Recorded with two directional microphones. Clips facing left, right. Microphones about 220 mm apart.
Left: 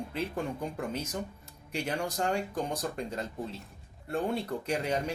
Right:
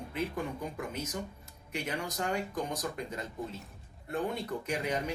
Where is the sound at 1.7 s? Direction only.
30° left (ahead or behind).